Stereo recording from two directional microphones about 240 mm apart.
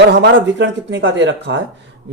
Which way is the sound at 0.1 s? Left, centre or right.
Right.